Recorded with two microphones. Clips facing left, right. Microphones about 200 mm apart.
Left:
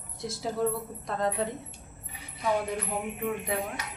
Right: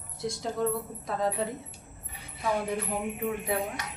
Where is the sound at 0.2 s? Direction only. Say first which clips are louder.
Even; centre (ahead or behind).